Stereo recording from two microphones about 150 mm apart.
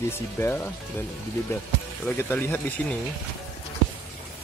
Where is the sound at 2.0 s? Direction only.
10° left (ahead or behind).